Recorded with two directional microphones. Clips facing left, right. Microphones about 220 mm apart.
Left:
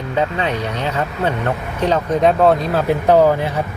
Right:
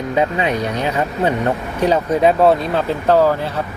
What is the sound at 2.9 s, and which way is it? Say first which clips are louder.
Speech: left 2 dB; 15° left (ahead or behind).